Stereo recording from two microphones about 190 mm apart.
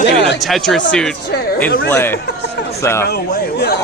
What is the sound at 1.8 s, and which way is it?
Speech, 10° left (ahead or behind).